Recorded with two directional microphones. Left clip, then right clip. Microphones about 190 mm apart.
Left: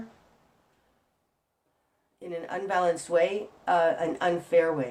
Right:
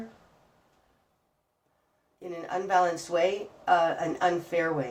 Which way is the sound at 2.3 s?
35° left (ahead or behind).